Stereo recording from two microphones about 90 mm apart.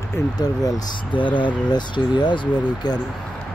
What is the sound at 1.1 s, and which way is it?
Speech, 65° left (ahead or behind).